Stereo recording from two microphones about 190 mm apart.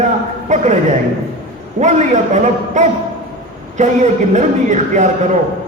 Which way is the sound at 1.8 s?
40° right (ahead or behind).